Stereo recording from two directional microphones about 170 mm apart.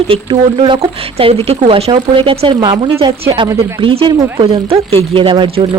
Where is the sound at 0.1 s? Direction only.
30° right (ahead or behind).